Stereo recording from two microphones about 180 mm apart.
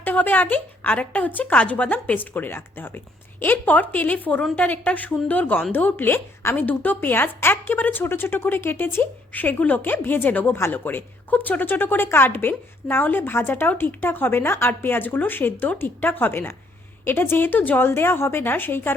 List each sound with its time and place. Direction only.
0.0 s a woman's voice: 10° left (ahead or behind)